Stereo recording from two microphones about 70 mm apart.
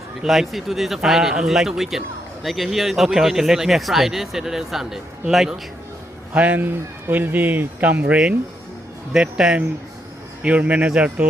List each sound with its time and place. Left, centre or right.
0.2 s speech: centre
6.3 s speech: right
9.1 s a man's voice: centre